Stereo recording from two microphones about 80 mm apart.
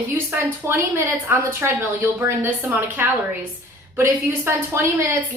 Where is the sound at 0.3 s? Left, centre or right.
Right.